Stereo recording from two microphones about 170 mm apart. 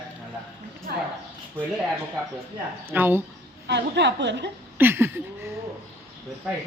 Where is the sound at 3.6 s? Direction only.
90° right.